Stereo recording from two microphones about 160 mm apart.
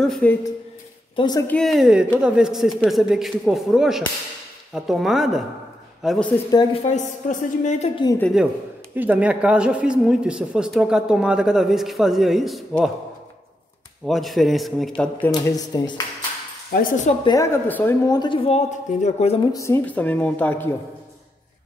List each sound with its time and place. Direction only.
0.0 s speech: 5° left (ahead or behind)
1.1 s speech: 25° left (ahead or behind)
1.5 s speech: centre (ahead or behind)
6.5 s speech: 30° left (ahead or behind)
6.8 s a woman's voice: 45° left (ahead or behind)
8.9 s speech: 10° right (ahead or behind)
14.0 s speech: centre (ahead or behind)
15.0 s speech: 10° left (ahead or behind)
15.3 s speech: 25° left (ahead or behind)
16.7 s speech: 70° left (ahead or behind)
17.2 s speech: 20° left (ahead or behind)
18.0 s a woman's voice: 25° left (ahead or behind)
19.5 s speech: 15° left (ahead or behind)